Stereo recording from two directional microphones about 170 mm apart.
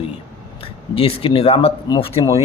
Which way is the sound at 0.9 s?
35° left (ahead or behind).